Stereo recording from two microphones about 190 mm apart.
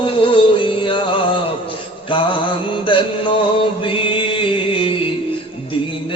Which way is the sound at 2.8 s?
25° left (ahead or behind).